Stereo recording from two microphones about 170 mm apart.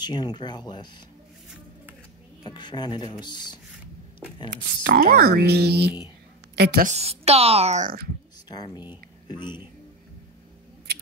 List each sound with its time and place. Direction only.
0.0 s speech: 25° left (ahead or behind)
2.4 s speech: 25° left (ahead or behind)
4.5 s a woman's voice: 65° right (ahead or behind)
6.9 s a woman's voice: 35° right (ahead or behind)
8.5 s speech: 25° left (ahead or behind)